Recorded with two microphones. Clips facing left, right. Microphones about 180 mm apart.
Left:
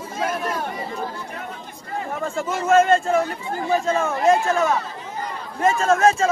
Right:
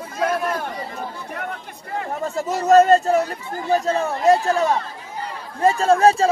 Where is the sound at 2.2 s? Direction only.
40° right (ahead or behind).